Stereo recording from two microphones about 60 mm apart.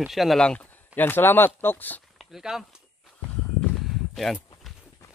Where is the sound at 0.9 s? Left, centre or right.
Left.